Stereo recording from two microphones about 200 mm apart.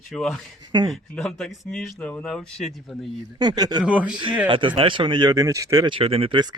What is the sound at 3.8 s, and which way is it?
Speech, 5° right (ahead or behind).